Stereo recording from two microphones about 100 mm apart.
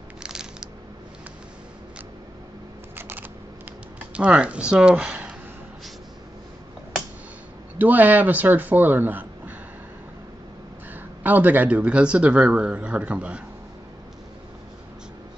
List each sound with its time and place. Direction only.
0.2 s a sound: 5° right (ahead or behind)
3.0 s camera: 20° right (ahead or behind)
4.1 s speech: 10° right (ahead or behind)
7.8 s speech: 15° right (ahead or behind)
10.9 s speech: 15° right (ahead or behind)